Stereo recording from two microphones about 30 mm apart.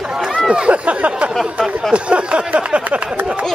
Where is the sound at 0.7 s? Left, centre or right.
Right.